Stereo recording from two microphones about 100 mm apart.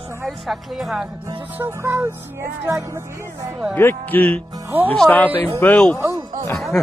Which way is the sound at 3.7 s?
20° left (ahead or behind).